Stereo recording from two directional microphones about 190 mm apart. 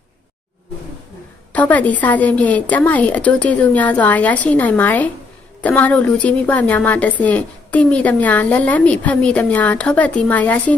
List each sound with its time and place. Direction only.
1.5 s a woman's voice: 10° left (ahead or behind)